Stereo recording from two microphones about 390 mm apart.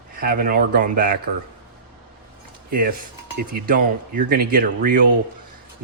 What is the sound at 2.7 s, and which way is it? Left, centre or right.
Speech, right.